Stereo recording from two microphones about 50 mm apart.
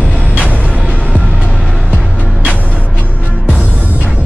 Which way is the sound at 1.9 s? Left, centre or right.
Centre.